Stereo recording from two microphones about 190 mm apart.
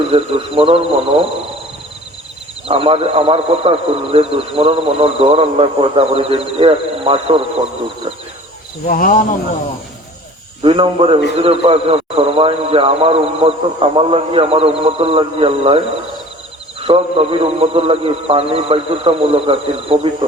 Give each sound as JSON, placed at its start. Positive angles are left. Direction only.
{"t": 0.1, "sound": "a man's voice", "side_deg": -30}
{"t": 2.6, "sound": "a man's voice", "side_deg": -30}
{"t": 8.9, "sound": "speech", "side_deg": 50}
{"t": 10.6, "sound": "a man's voice", "side_deg": -30}
{"t": 16.8, "sound": "a man's voice", "side_deg": -30}